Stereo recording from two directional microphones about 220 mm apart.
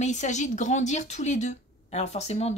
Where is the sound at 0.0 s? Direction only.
35° left (ahead or behind).